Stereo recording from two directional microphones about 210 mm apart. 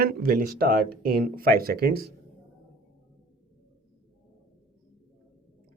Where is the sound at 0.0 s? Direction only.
45° right (ahead or behind).